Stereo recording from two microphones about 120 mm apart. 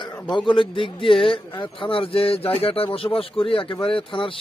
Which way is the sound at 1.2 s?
45° left (ahead or behind).